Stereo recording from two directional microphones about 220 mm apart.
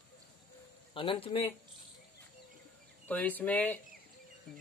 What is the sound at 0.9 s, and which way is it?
Speech, 25° left (ahead or behind).